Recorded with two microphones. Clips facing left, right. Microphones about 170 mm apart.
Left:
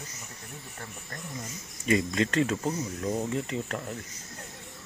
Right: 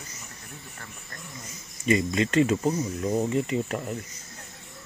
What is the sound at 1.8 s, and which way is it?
Speech, 5° right (ahead or behind).